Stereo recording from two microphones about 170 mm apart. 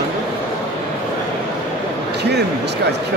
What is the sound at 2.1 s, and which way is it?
Speech, 80° right.